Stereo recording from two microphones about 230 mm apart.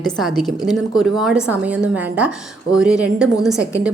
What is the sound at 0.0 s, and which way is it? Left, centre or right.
A woman's voice, centre.